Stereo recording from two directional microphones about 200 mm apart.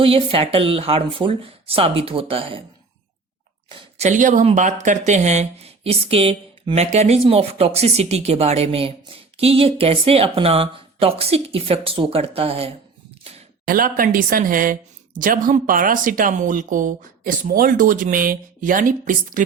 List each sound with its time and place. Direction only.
0.0 s speech: 25° right (ahead or behind)
3.7 s speech: 30° right (ahead or behind)
13.7 s speech: 45° right (ahead or behind)